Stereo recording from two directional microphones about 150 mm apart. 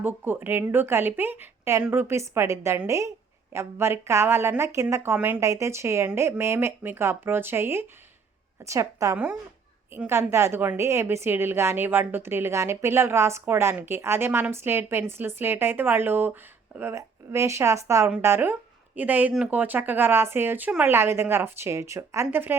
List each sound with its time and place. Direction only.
0.0 s a woman's voice: 15° right (ahead or behind)